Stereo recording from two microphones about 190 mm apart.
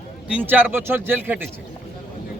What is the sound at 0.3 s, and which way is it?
Speech, 10° right (ahead or behind).